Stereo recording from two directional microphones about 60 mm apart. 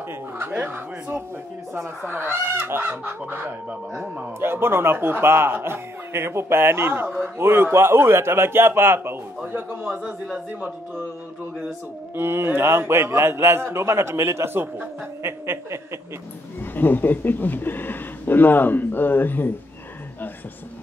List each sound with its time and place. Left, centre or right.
0.5 s fowl: right
2.1 s fowl: right
2.8 s fowl: right
5.0 s speech: right
9.5 s fowl: right
12.2 s speech: right
16.7 s speech: left